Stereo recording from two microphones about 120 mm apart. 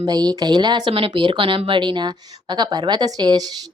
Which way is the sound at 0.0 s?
35° right (ahead or behind).